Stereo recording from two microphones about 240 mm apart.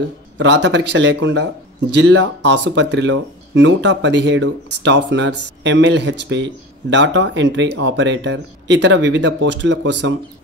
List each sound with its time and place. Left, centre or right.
0.4 s speech: right